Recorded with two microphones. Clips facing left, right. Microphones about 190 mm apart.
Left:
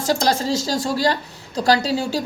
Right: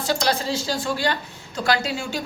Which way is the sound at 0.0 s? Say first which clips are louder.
Left 3 dB; 45° left (ahead or behind).